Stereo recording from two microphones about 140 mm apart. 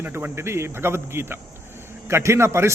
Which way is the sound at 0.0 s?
15° right (ahead or behind).